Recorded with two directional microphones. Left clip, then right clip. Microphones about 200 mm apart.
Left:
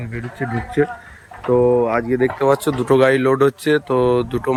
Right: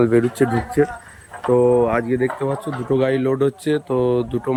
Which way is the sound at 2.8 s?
5° right (ahead or behind).